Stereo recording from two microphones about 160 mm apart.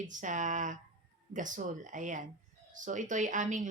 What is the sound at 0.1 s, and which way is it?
Speech, 50° right (ahead or behind).